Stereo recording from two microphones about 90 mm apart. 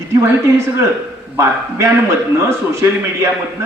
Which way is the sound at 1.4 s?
30° right (ahead or behind).